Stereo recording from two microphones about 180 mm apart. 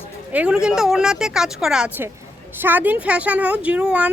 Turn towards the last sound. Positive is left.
turn(degrees=-5)  # may be behind; listen again after turning